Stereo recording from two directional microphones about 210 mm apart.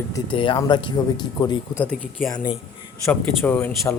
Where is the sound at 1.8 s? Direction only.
5° left (ahead or behind).